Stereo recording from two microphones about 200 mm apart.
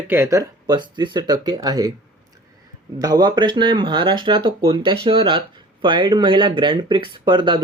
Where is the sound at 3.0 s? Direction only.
20° right (ahead or behind).